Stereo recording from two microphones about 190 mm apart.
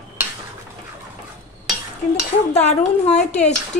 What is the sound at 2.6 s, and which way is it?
Speech, 35° left (ahead or behind).